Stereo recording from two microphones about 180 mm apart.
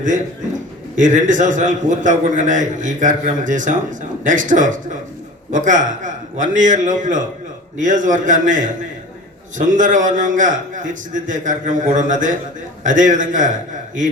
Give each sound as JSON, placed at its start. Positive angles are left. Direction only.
{"t": 0.9, "sound": "a man's voice", "side_deg": -45}